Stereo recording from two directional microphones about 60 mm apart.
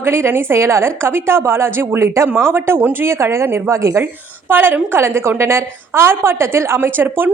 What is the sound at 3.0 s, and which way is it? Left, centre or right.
A woman's voice, right.